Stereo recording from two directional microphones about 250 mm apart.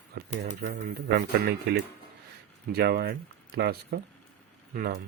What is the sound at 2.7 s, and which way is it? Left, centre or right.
Speech, right.